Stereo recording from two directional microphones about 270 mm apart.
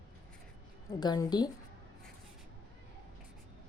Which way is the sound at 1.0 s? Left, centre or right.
Centre.